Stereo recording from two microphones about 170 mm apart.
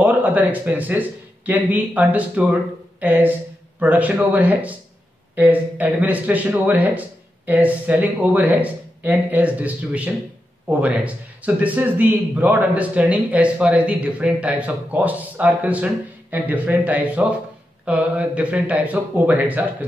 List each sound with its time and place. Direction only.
0.0 s a man's voice: 10° right (ahead or behind)